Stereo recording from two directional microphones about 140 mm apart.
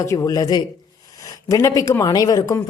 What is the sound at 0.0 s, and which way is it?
Speech, 20° left (ahead or behind).